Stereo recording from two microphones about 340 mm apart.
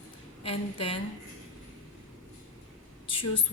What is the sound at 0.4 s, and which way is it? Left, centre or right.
Speech, centre.